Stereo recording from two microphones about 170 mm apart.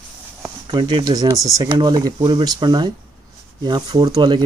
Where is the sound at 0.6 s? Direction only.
25° right (ahead or behind).